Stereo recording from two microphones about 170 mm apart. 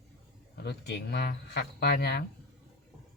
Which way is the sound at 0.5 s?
80° left.